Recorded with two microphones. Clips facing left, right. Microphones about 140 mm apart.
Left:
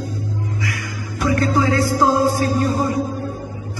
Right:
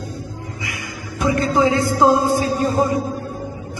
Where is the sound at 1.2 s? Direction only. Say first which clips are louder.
Right 1 dB; 20° right (ahead or behind).